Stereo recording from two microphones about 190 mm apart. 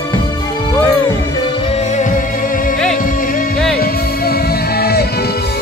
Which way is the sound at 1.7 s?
35° left (ahead or behind).